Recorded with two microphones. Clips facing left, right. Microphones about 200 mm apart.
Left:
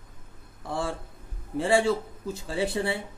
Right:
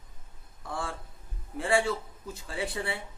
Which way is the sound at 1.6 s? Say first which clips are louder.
Left 4 dB; 25° left (ahead or behind).